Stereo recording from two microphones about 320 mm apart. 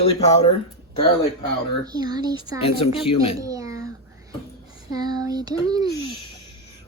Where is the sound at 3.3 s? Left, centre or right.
Centre.